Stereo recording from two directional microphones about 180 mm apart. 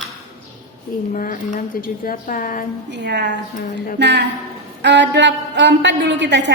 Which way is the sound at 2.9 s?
70° right (ahead or behind).